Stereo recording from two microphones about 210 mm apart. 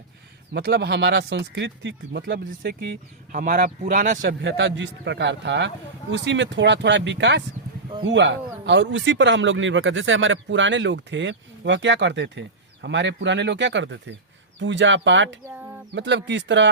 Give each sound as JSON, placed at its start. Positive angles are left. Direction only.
{"t": 0.5, "sound": "speech", "side_deg": -50}
{"t": 3.3, "sound": "speech", "side_deg": -40}